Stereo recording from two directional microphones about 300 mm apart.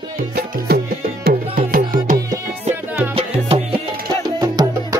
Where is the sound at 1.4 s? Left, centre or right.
Centre.